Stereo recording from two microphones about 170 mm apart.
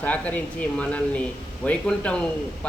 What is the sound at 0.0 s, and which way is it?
Speech, 10° left (ahead or behind).